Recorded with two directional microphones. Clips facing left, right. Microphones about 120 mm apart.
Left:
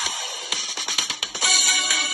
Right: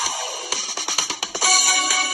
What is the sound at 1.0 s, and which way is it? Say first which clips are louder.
Music: right 6 dB; 40° right (ahead or behind).